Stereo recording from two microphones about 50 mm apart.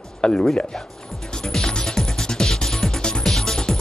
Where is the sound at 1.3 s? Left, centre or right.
Centre.